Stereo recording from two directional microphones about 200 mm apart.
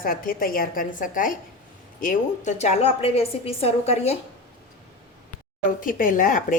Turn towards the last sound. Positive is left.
turn(degrees=40)  # may be behind; listen again after turning